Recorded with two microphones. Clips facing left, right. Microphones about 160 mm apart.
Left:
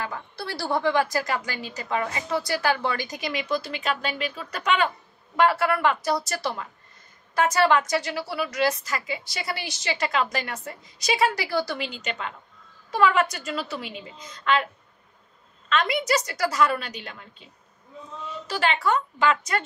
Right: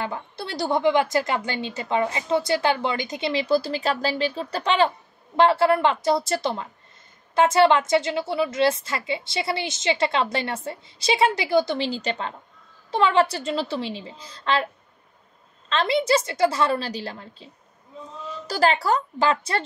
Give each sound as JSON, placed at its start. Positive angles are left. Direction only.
{"t": 0.0, "sound": "a woman's voice", "side_deg": -25}
{"t": 15.7, "sound": "a woman's voice", "side_deg": -30}
{"t": 18.5, "sound": "speech", "side_deg": -35}